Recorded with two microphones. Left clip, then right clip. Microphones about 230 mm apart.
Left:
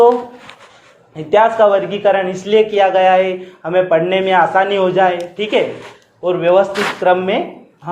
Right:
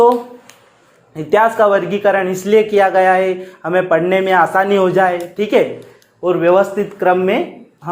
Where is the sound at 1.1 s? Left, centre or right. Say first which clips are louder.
Left 1 dB; right.